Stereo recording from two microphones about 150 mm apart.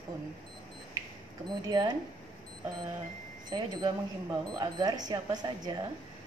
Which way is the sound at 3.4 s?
30° right (ahead or behind).